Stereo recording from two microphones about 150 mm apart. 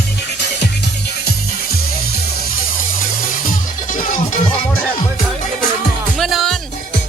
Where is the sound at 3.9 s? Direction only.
65° left (ahead or behind).